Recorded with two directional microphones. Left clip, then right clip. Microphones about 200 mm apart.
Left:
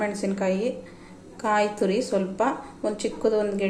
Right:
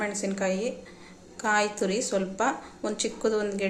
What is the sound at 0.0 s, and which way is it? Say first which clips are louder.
A woman's voice: left 3 dB; 5° right (ahead or behind).